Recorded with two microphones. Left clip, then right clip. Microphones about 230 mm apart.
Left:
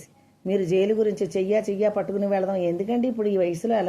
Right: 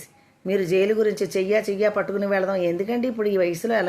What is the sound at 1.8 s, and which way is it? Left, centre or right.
Speech, right.